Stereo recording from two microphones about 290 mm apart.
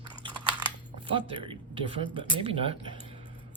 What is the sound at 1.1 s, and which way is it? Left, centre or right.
Speech, centre.